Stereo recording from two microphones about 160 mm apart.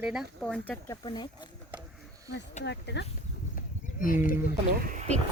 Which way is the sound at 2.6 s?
90° left.